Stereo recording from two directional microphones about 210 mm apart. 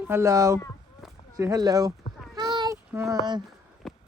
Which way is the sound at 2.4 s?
20° right (ahead or behind).